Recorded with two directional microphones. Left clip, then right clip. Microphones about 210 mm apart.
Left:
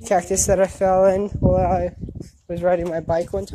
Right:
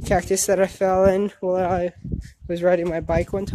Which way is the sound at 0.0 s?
15° right (ahead or behind).